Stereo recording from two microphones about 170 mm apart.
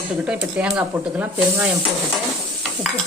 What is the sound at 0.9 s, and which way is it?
Speech, 10° right (ahead or behind).